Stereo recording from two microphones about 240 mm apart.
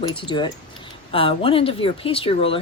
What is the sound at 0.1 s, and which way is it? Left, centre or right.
A woman's voice, centre.